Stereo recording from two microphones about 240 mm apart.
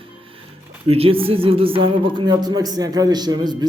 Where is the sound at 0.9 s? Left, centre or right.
Right.